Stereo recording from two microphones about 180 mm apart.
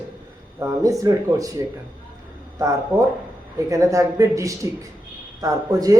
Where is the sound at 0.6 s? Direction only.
20° right (ahead or behind).